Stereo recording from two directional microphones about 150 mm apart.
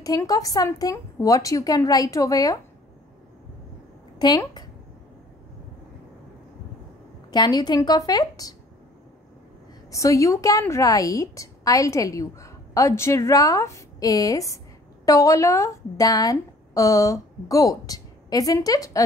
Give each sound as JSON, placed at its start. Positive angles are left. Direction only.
{"t": 0.0, "sound": "a woman's voice", "side_deg": 25}
{"t": 4.2, "sound": "a woman's voice", "side_deg": 30}
{"t": 7.2, "sound": "a woman's voice", "side_deg": 25}
{"t": 9.8, "sound": "a woman's voice", "side_deg": 20}